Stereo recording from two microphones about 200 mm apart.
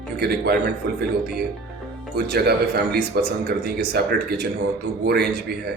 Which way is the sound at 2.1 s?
50° right (ahead or behind).